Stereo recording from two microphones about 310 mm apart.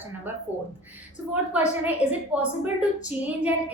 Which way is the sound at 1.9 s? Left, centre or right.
Centre.